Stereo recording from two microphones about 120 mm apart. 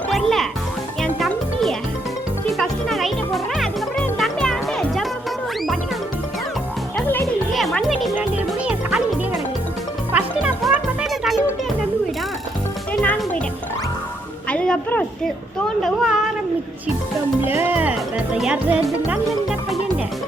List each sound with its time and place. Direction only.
0.1 s music: centre (ahead or behind)
2.5 s music: centre (ahead or behind)
7.5 s music: centre (ahead or behind)
8.2 s music: 10° right (ahead or behind)
10.1 s music: 15° right (ahead or behind)
11.0 s music: centre (ahead or behind)
12.9 s music: 10° left (ahead or behind)
14.5 s music: 10° left (ahead or behind)
15.6 s a sound: centre (ahead or behind)
17.4 s music: 15° right (ahead or behind)